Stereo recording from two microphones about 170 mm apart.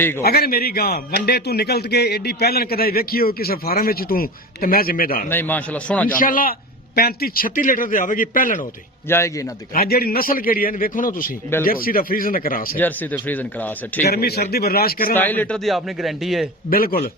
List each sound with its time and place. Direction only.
0.2 s a man's voice: 65° left (ahead or behind)
5.3 s speech: 10° left (ahead or behind)
6.1 s a man's voice: 55° left (ahead or behind)
9.0 s speech: 15° left (ahead or behind)
9.7 s a man's voice: 65° left (ahead or behind)
12.7 s speech: 10° left (ahead or behind)
14.1 s a man's voice: 70° left (ahead or behind)
15.1 s a man's voice: 10° left (ahead or behind)
16.6 s a man's voice: 60° left (ahead or behind)